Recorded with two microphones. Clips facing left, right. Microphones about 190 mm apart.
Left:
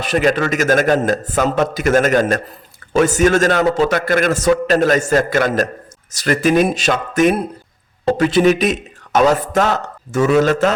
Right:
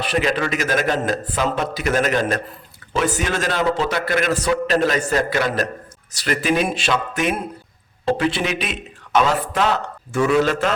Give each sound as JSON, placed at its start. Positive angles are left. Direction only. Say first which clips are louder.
{"t": 0.0, "sound": "a man's voice", "louder": "left 5 dB", "side_deg": 45}